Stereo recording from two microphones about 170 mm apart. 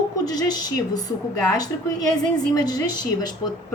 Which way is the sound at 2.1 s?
25° left (ahead or behind).